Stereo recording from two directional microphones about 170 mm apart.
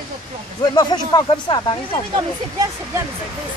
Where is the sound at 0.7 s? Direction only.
25° left (ahead or behind).